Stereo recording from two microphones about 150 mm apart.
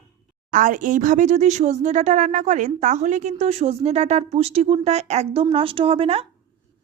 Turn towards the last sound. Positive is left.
turn(degrees=-40)  # may be behind; listen again after turning